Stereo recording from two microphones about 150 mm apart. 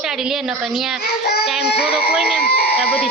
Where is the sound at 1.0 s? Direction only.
90° left.